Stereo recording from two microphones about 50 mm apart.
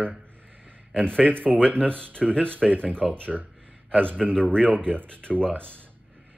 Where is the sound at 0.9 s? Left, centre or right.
Centre.